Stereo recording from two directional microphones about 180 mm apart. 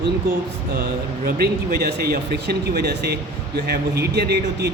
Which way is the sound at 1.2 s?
60° right (ahead or behind).